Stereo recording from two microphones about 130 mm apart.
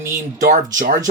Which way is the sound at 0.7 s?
90° right.